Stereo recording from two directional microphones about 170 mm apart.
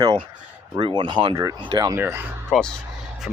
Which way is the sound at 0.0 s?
30° right (ahead or behind).